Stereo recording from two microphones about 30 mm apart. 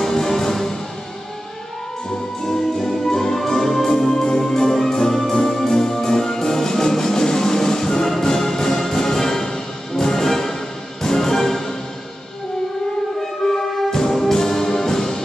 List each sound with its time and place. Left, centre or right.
0.0 s music: centre
2.4 s music: centre
13.2 s music: centre
14.4 s music: centre